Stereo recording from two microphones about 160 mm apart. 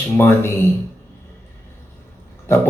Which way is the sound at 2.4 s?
15° left (ahead or behind).